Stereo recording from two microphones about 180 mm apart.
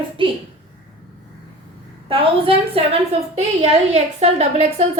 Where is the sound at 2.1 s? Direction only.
30° right (ahead or behind).